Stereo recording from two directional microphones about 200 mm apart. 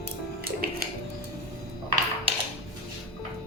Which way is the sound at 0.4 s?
50° right (ahead or behind).